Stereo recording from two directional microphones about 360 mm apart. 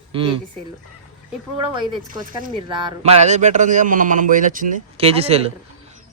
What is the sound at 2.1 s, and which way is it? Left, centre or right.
Speech, centre.